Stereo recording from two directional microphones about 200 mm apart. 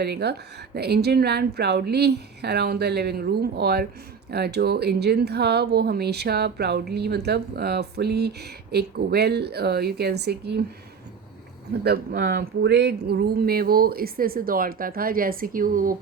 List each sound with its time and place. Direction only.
0.0 s speech: 55° right (ahead or behind)
11.8 s speech: 50° right (ahead or behind)